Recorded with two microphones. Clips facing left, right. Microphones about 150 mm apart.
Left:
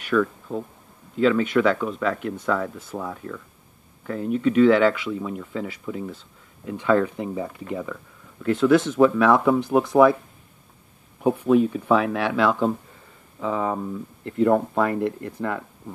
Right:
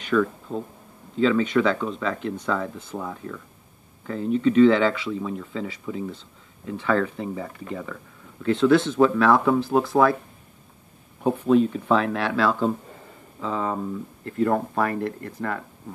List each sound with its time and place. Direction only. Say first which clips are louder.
0.0 s speech: even; 5° left (ahead or behind)
4.2 s speech: right 1 dB; 10° left (ahead or behind)
11.2 s speech: left 1 dB; 10° left (ahead or behind)